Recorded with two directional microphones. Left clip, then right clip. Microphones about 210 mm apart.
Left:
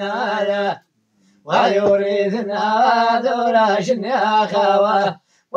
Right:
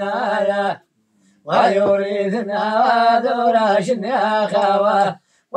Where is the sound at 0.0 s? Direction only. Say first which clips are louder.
Right 1 dB; centre (ahead or behind).